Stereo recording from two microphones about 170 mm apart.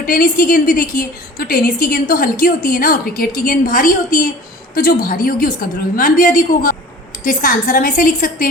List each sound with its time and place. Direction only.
0.0 s a woman's voice: 60° left (ahead or behind)